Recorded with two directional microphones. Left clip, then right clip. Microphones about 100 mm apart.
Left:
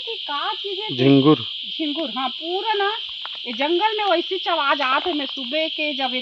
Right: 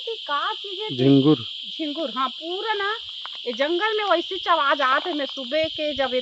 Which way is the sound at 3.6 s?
45° right (ahead or behind).